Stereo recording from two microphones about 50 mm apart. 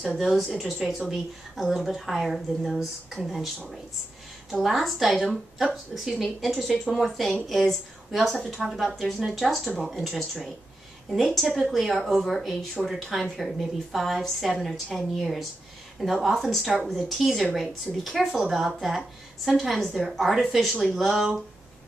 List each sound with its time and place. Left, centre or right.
0.6 s a woman's voice: centre
4.6 s a woman's voice: centre
12.8 s speech: centre
13.2 s a woman's voice: centre